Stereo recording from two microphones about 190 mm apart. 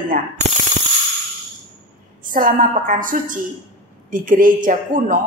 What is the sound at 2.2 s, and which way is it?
A woman's voice, 45° right (ahead or behind).